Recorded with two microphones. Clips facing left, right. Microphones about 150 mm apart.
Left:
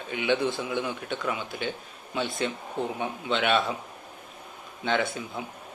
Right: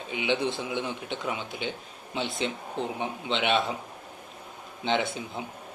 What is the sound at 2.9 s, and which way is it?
Speech, 20° right (ahead or behind).